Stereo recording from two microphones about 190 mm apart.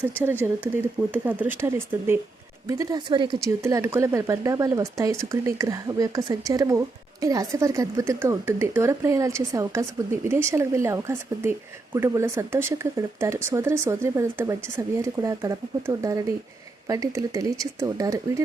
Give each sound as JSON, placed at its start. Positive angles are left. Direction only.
{"t": 0.2, "sound": "speech", "side_deg": -10}